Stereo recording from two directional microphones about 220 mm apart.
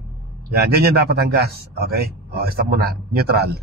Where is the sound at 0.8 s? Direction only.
45° right (ahead or behind).